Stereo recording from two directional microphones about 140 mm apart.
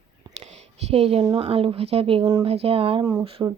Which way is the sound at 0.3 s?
50° right (ahead or behind).